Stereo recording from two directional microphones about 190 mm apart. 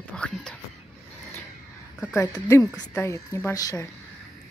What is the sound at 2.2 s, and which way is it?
Speech, 15° left (ahead or behind).